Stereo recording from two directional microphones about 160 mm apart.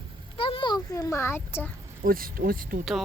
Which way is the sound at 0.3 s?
35° left (ahead or behind).